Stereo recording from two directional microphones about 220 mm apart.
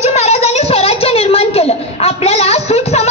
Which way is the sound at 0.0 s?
30° left (ahead or behind).